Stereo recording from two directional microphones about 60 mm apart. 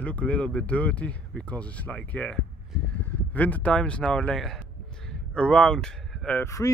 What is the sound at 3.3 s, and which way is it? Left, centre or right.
Speech, left.